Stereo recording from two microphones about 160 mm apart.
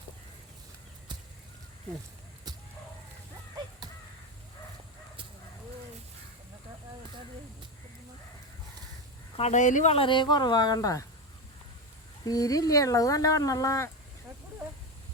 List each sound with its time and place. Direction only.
9.3 s speech: 45° left (ahead or behind)
9.9 s speech: 30° left (ahead or behind)
12.2 s speech: 20° left (ahead or behind)